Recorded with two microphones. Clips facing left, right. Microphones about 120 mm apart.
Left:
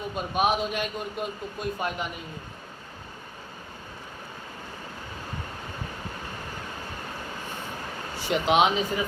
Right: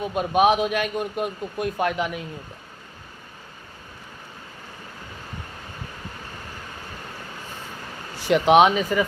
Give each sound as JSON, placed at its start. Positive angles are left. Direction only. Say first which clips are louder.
{"t": 0.2, "sound": "a man's voice", "louder": "right 6 dB", "side_deg": -65}
{"t": 8.3, "sound": "a man's voice", "louder": "right 6 dB", "side_deg": -60}